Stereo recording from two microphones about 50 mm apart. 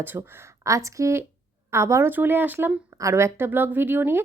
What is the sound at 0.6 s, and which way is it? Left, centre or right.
A woman's voice, right.